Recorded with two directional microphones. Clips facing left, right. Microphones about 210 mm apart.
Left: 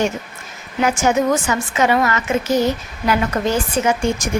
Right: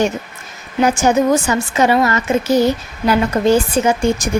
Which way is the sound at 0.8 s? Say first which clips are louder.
Right 3 dB; 35° right (ahead or behind).